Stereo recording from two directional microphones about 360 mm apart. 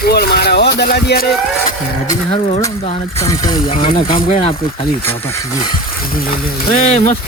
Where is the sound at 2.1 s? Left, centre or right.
Centre.